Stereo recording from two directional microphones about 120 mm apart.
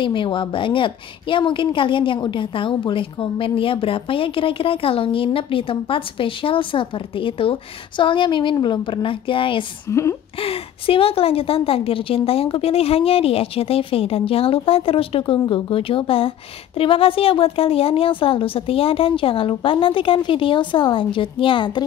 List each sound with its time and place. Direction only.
0.0 s a woman's voice: 45° left (ahead or behind)
9.8 s a woman's voice: 25° left (ahead or behind)
10.4 s a woman's voice: 50° left (ahead or behind)